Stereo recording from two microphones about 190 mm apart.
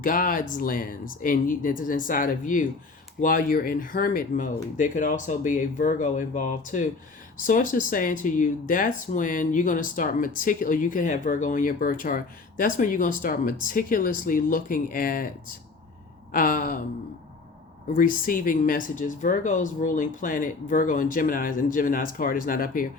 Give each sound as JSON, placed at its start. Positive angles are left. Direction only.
{"t": 0.0, "sound": "speech", "side_deg": 45}
{"t": 16.3, "sound": "speech", "side_deg": 45}
{"t": 17.9, "sound": "speech", "side_deg": 45}